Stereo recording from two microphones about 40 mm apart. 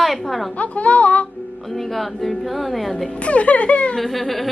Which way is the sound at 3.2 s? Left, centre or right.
Left.